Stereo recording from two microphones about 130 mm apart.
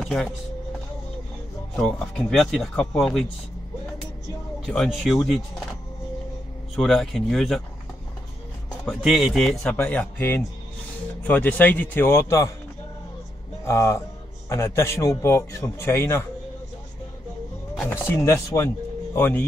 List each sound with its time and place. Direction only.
0.0 s speech: centre (ahead or behind)
1.8 s speech: 5° left (ahead or behind)
4.6 s speech: centre (ahead or behind)
6.7 s speech: centre (ahead or behind)
8.8 s speech: centre (ahead or behind); by 12.5 s 25° left (ahead or behind)
13.7 s a man's voice: 20° left (ahead or behind)
17.8 s a man's voice: 20° left (ahead or behind)